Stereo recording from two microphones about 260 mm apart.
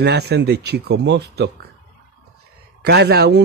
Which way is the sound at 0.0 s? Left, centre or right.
Right.